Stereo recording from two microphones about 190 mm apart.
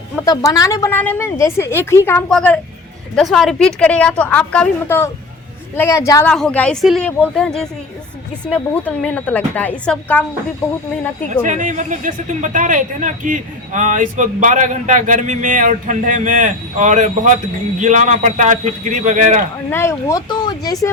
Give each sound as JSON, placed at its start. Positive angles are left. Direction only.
{"t": 0.2, "sound": "a woman's voice", "side_deg": 15}
{"t": 11.4, "sound": "speech", "side_deg": -40}
{"t": 19.7, "sound": "a woman's voice", "side_deg": 15}